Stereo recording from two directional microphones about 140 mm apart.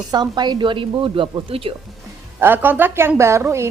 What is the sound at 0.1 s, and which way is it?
A woman's voice, 30° right (ahead or behind).